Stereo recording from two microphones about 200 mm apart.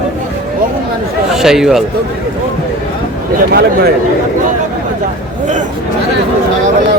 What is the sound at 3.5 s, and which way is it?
Speech, 50° right (ahead or behind).